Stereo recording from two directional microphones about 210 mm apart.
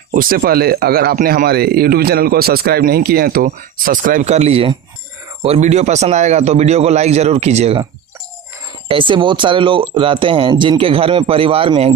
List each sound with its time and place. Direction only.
0.1 s a man's voice: 40° right (ahead or behind)
8.9 s speech: 25° right (ahead or behind)